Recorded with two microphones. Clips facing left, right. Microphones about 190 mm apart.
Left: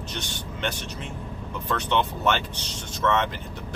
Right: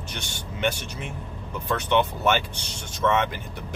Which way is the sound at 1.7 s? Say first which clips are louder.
Right 2 dB; 10° right (ahead or behind).